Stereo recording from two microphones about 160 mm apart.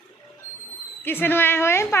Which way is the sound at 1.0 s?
15° left (ahead or behind).